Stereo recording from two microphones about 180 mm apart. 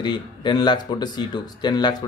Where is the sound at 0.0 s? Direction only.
25° left (ahead or behind).